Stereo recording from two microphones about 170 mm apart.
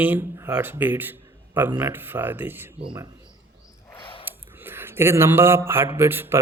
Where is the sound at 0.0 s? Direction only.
10° right (ahead or behind).